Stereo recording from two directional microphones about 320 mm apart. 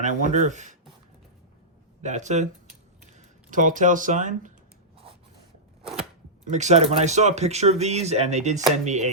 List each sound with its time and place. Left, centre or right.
0.0 s speech: right
2.0 s speech: right
5.8 s chopping: centre
6.5 s speech: right